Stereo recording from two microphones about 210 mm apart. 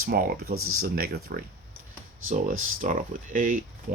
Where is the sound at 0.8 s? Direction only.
45° right (ahead or behind).